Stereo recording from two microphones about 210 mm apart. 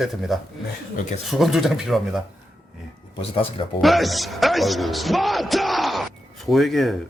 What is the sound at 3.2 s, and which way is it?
Speech, 25° left (ahead or behind).